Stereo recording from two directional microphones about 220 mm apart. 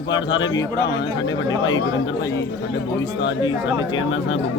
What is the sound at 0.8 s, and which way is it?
Speech, 55° left (ahead or behind).